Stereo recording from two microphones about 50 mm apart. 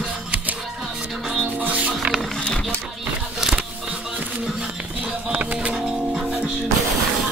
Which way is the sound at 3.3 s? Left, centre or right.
Centre.